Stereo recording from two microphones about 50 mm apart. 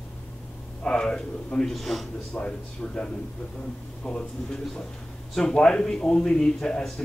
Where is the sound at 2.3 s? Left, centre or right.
Left.